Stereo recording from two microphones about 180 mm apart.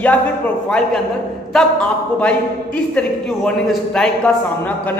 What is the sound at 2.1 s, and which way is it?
A woman's voice, 5° left (ahead or behind).